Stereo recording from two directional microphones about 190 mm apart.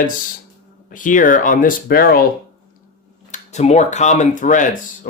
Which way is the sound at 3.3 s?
35° left (ahead or behind).